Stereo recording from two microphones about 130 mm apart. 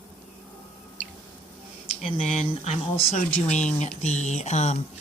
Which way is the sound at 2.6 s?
55° left (ahead or behind).